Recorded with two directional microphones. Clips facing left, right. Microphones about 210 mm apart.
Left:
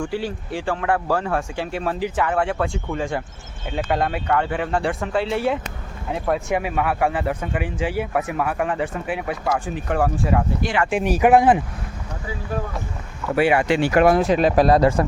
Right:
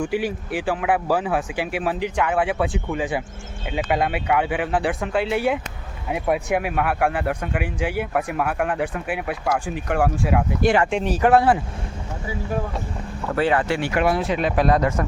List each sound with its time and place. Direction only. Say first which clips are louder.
0.0 s speech: right 2 dB; 15° right (ahead or behind)
10.6 s speech: right 4 dB; 50° right (ahead or behind)
10.9 s speech: left 2 dB; 10° left (ahead or behind)
13.3 s speech: left 3 dB; 10° left (ahead or behind)
13.9 s speech: left 6 dB; 45° left (ahead or behind)